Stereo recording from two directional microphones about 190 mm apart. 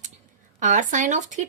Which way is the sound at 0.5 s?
40° right (ahead or behind).